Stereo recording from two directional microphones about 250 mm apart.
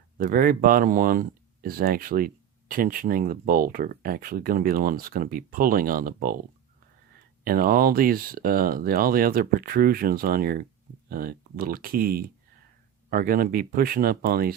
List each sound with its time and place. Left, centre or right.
0.2 s speech: right
7.4 s speech: right